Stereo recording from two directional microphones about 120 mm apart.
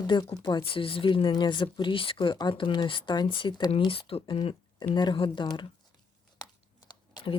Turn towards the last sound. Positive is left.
turn(degrees=45)  # may be behind; listen again after turning